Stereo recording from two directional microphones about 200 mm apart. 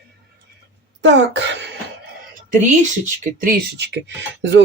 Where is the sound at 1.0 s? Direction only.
60° right (ahead or behind).